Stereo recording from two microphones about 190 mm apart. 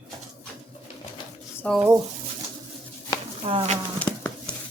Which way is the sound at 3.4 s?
30° right (ahead or behind).